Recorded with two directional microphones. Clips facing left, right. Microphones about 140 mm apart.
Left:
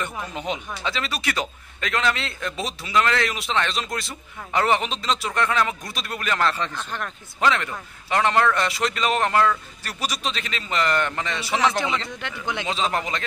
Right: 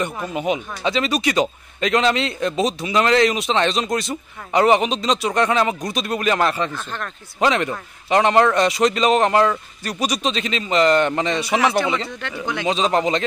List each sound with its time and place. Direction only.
0.0 s a man's voice: 10° right (ahead or behind)